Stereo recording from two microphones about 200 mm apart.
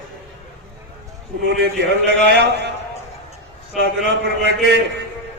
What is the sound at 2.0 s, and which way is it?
Speech, 60° right (ahead or behind).